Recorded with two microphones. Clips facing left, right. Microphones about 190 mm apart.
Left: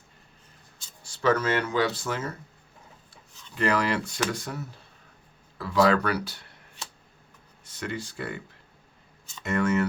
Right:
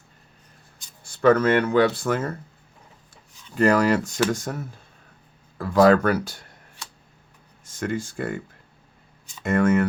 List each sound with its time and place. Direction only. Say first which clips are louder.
1.0 s speech: right 7 dB; 55° right (ahead or behind)
3.5 s speech: right 7 dB; 45° right (ahead or behind)
7.6 s speech: right 6 dB; 45° right (ahead or behind)
9.4 s speech: right 5 dB; 50° right (ahead or behind)